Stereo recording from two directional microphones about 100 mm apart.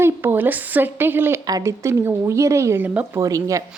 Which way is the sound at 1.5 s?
35° right (ahead or behind).